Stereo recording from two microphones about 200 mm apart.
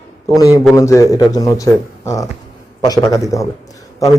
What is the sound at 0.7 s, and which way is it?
Speech, 15° left (ahead or behind).